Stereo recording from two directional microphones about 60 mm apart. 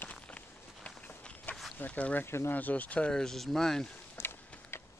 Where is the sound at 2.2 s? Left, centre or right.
Left.